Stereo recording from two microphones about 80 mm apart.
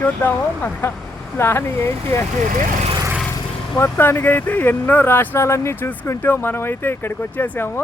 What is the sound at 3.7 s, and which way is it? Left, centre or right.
Speech, left.